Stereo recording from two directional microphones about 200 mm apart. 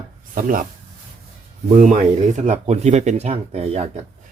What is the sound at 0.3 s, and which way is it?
Speech, 45° right (ahead or behind).